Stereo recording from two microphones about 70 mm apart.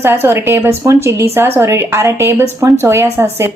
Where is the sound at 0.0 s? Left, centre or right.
Right.